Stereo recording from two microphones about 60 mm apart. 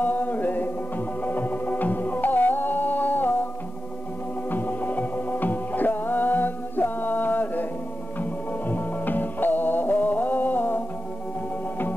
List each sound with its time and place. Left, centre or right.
0.0 s music: left
4.5 s music: left